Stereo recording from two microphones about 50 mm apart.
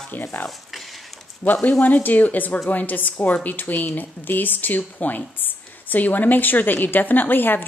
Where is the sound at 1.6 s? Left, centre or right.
Left.